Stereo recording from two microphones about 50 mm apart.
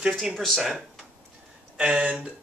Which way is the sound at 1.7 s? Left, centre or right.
Centre.